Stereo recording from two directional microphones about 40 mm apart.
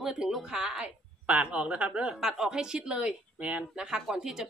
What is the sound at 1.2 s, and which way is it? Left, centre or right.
Speech, right.